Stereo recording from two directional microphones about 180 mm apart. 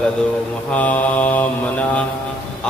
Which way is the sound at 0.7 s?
10° left (ahead or behind).